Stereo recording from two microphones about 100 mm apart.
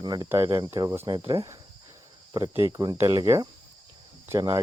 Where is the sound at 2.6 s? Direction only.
40° right (ahead or behind).